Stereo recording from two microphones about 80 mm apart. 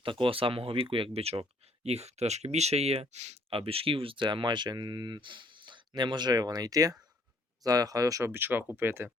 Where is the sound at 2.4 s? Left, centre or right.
Right.